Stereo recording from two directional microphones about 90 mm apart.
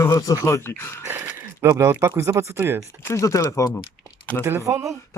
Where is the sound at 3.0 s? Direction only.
35° left (ahead or behind).